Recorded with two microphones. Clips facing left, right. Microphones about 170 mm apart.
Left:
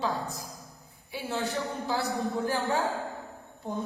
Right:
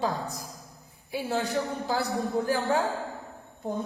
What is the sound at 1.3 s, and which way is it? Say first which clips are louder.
Speech: right 2 dB; 35° right (ahead or behind).